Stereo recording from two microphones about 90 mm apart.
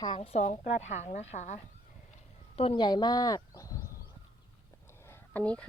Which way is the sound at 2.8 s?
50° left (ahead or behind).